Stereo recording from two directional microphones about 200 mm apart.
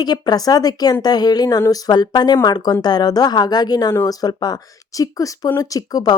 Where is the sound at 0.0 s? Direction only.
20° left (ahead or behind).